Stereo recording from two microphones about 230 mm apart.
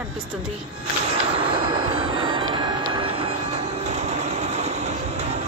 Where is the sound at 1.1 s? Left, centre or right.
Right.